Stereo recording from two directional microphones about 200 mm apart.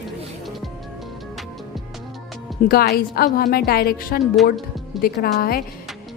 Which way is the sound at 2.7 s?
50° left (ahead or behind).